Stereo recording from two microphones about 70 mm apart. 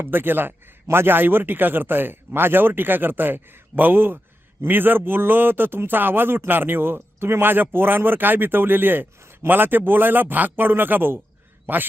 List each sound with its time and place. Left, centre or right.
0.0 s a man's voice: right